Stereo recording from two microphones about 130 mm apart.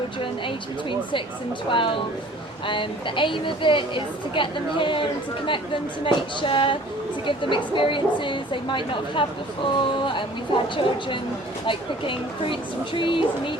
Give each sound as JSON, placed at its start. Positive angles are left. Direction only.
{"t": 0.2, "sound": "a woman's voice", "side_deg": 40}